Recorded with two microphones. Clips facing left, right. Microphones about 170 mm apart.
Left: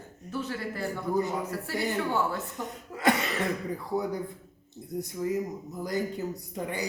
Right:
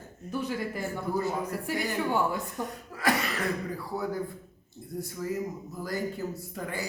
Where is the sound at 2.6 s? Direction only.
20° left (ahead or behind).